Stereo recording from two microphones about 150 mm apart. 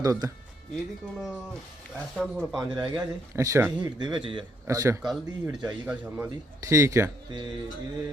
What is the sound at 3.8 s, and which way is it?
Speech, 30° right (ahead or behind).